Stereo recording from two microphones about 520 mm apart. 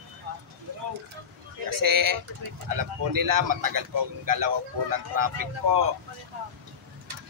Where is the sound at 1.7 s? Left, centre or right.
Right.